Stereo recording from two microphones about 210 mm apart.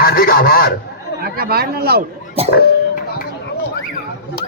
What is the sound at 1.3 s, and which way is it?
Speech, 45° right (ahead or behind).